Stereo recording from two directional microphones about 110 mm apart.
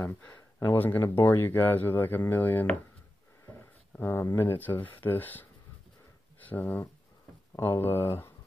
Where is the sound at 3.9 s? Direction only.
20° left (ahead or behind).